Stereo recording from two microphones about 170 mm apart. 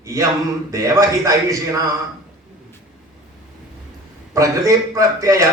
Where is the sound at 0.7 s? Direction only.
20° right (ahead or behind).